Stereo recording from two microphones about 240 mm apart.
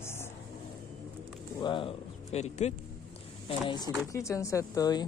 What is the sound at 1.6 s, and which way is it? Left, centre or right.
Speech, left.